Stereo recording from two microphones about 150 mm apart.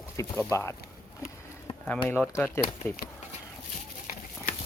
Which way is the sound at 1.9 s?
15° left (ahead or behind).